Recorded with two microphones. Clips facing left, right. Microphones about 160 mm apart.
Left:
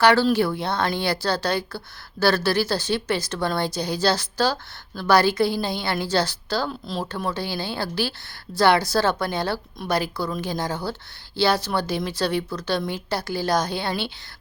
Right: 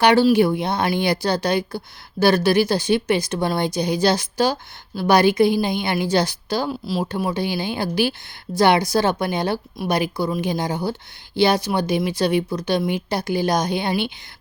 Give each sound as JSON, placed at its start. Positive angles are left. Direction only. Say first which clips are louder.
{"t": 0.0, "sound": "a woman's voice", "louder": "right 3 dB", "side_deg": -15}